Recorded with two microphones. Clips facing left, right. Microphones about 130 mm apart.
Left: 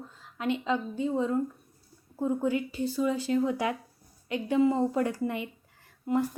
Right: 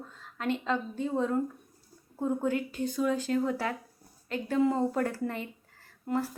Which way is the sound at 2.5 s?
50° right (ahead or behind).